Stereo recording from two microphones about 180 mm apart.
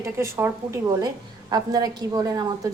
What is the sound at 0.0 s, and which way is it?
A woman's voice, 15° right (ahead or behind).